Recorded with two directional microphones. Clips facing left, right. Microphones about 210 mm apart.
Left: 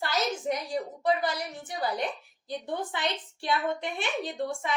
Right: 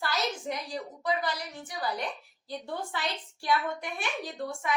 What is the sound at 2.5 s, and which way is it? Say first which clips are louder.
A woman's voice: left 3 dB; 20° left (ahead or behind).